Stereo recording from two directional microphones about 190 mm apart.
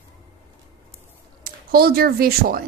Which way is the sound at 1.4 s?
50° right (ahead or behind).